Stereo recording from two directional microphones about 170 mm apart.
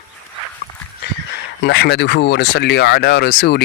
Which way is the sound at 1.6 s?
85° left.